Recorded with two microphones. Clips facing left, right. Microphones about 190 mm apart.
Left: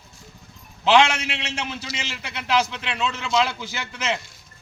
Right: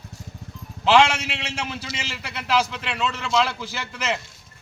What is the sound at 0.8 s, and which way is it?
A man's voice, 5° right (ahead or behind).